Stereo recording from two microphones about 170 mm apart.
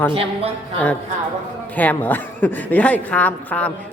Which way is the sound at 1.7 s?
10° left (ahead or behind).